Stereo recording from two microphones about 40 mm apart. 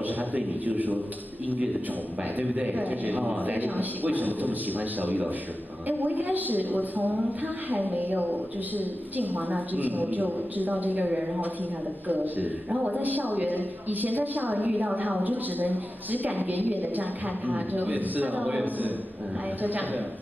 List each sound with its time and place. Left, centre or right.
0.0 s a woman's voice: right
2.3 s a woman's voice: right
12.8 s a woman's voice: right
19.6 s a woman's voice: right